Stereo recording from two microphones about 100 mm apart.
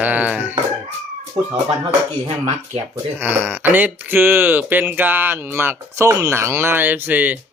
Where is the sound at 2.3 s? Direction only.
90° right.